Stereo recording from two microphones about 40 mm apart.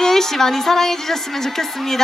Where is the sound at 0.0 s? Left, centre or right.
Centre.